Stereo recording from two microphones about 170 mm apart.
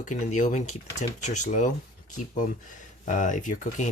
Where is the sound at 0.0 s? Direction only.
45° left (ahead or behind).